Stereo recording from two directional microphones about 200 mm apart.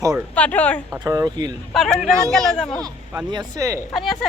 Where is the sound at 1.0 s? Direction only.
15° right (ahead or behind).